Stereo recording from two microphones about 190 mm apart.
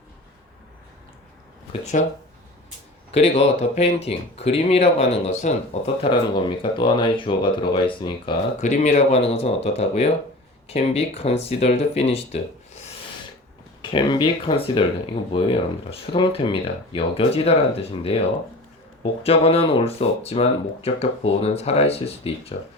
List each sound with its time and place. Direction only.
1.7 s speech: 40° left (ahead or behind)
3.1 s speech: 35° left (ahead or behind)
8.6 s speech: 40° left (ahead or behind)
13.8 s speech: 25° left (ahead or behind)